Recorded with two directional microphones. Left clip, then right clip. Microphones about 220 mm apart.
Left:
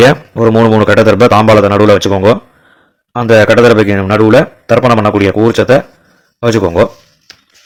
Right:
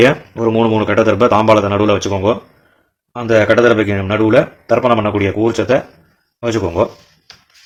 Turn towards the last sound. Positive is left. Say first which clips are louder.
# left 7 dB
turn(degrees=30)  # may be behind; listen again after turning